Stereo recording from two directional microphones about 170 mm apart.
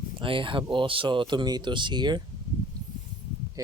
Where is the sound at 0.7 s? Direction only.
30° right (ahead or behind).